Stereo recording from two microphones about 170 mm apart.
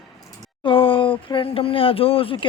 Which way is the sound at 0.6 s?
30° left (ahead or behind).